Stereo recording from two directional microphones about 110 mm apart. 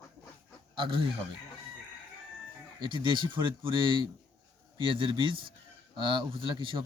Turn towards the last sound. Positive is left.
turn(degrees=-50)  # may be behind; listen again after turning